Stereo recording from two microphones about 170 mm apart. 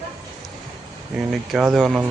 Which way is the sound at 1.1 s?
Centre (ahead or behind).